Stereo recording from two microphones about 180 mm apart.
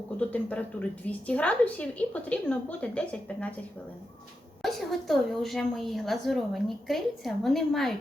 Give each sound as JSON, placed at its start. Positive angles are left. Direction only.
{"t": 0.2, "sound": "a woman's voice", "side_deg": 10}
{"t": 4.6, "sound": "a woman's voice", "side_deg": 0}